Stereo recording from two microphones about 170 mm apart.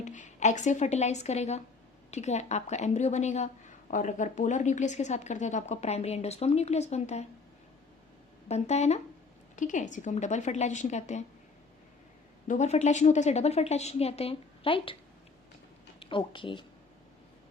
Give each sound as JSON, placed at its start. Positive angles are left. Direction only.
{"t": 0.0, "sound": "a woman's voice", "side_deg": 45}
{"t": 8.4, "sound": "a woman's voice", "side_deg": 40}
{"t": 12.5, "sound": "a woman's voice", "side_deg": 40}
{"t": 16.0, "sound": "speech", "side_deg": 30}